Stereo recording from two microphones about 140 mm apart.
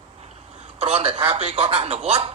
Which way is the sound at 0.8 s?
45° right (ahead or behind).